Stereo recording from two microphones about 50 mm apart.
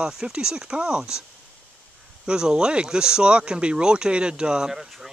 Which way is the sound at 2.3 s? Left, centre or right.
Centre.